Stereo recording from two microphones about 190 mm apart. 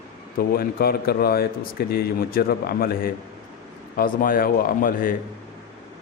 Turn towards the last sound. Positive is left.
turn(degrees=45)  # may be behind; listen again after turning